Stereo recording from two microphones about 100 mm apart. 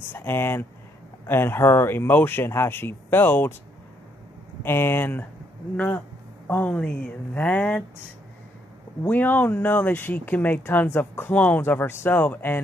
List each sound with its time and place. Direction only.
0.1 s speech: 25° left (ahead or behind)
4.6 s speech: 20° left (ahead or behind)
9.0 s speech: 15° left (ahead or behind)